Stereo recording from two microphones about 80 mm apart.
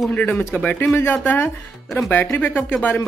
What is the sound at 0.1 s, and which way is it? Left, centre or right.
Speech, left.